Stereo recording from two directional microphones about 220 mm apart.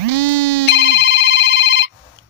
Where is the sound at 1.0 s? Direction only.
55° left (ahead or behind).